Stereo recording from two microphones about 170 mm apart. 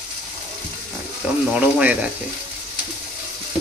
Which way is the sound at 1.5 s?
10° right (ahead or behind).